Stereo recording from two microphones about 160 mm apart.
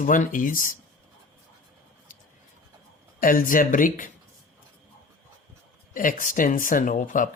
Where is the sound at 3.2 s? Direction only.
60° left (ahead or behind).